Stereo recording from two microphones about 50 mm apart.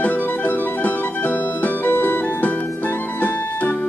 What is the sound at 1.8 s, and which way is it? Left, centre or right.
Music, left.